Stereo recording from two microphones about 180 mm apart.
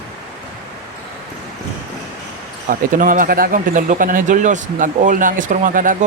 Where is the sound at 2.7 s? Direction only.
50° right (ahead or behind).